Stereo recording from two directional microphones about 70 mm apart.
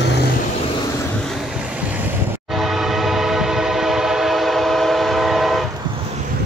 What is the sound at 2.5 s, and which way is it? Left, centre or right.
Train, centre.